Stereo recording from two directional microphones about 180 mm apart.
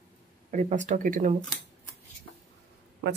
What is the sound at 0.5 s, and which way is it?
Speech, 45° right (ahead or behind).